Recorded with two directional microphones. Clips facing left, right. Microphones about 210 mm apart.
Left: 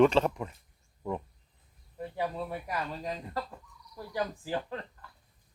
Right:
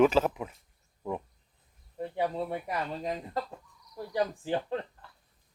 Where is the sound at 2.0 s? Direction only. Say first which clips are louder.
Right 3 dB; 25° right (ahead or behind).